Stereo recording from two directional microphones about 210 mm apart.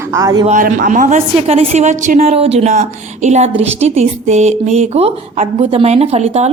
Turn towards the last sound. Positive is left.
turn(degrees=-30)  # may be behind; listen again after turning